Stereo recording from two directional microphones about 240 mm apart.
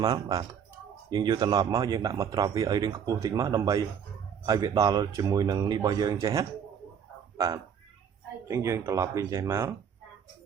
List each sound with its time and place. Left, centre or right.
0.0 s speech: centre